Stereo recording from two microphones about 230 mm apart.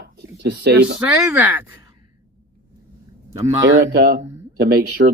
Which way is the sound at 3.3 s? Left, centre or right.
Centre.